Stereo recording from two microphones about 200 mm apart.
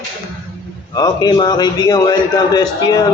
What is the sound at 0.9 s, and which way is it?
A man's voice, 20° left (ahead or behind).